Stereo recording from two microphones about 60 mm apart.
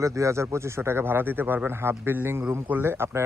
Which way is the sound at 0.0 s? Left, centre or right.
Right.